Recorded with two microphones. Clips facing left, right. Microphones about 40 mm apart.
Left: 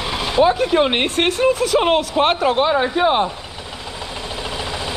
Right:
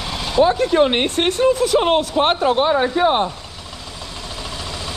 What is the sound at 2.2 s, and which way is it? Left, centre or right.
Speech, left.